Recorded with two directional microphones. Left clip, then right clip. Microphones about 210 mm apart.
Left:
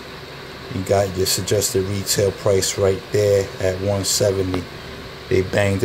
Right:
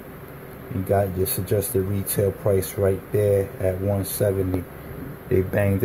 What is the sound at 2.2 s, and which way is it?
Speech, centre (ahead or behind).